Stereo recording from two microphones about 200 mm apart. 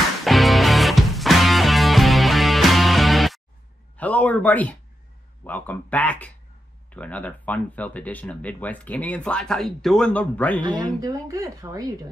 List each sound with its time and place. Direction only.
0.2 s music: centre (ahead or behind)
3.9 s a sound: 5° left (ahead or behind)
5.4 s speech: 10° left (ahead or behind)
10.6 s speech: 20° right (ahead or behind)